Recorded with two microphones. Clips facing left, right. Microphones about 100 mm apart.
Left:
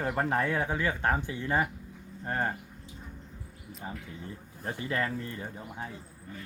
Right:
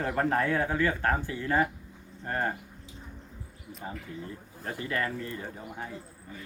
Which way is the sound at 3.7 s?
Centre (ahead or behind).